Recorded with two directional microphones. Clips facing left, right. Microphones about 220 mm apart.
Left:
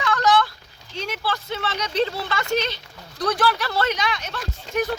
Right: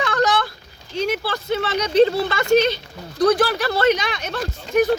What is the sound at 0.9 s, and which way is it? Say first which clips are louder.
Speech: right 6 dB; 50° right (ahead or behind).